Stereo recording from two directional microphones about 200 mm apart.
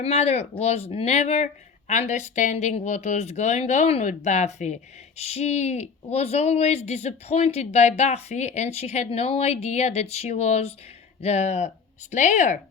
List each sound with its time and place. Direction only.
0.0 s speech: 30° left (ahead or behind)